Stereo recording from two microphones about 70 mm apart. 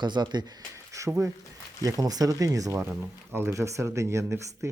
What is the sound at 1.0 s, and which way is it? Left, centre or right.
Speech, right.